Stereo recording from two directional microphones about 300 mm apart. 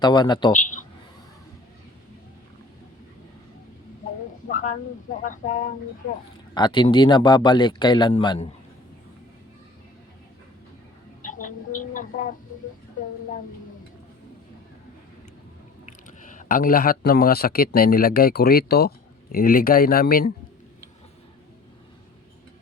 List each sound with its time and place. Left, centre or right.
0.0 s speech: centre
4.4 s a sound: left
5.2 s speech: left
6.5 s speech: centre
11.2 s a sound: left
15.9 s speech: left